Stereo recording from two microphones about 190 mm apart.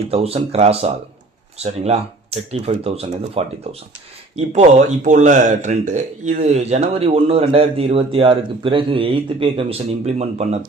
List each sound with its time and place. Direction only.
0.1 s speech: 30° right (ahead or behind)